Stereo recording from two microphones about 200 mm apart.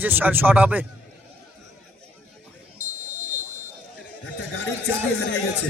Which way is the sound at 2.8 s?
35° right (ahead or behind).